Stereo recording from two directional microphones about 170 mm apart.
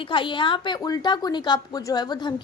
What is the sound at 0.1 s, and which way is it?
A woman's voice, 30° left (ahead or behind).